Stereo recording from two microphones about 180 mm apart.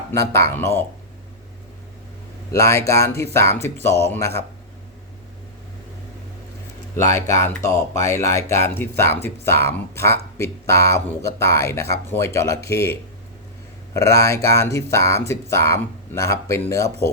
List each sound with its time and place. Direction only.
0.1 s speech: 15° left (ahead or behind)
2.5 s speech: 15° left (ahead or behind)
6.9 s speech: 15° left (ahead or behind)